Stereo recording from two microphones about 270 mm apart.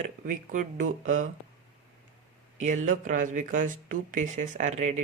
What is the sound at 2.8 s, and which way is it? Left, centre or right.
Speech, right.